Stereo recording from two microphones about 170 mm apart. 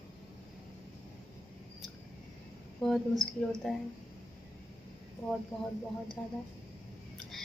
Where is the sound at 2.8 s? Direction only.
5° left (ahead or behind).